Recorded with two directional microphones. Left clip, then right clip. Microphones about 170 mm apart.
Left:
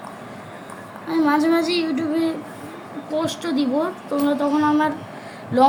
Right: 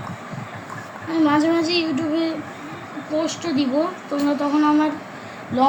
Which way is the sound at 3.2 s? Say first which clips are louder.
Even; 40° left (ahead or behind).